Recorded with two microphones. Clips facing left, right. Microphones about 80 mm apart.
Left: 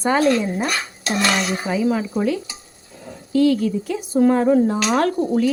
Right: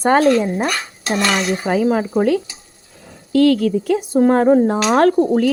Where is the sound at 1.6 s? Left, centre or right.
Right.